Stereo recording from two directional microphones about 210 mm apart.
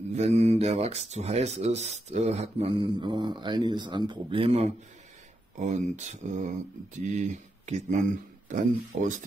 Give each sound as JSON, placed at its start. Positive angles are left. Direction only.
{"t": 0.1, "sound": "rub", "side_deg": -30}
{"t": 7.2, "sound": "speech", "side_deg": -35}
{"t": 8.5, "sound": "rub", "side_deg": -35}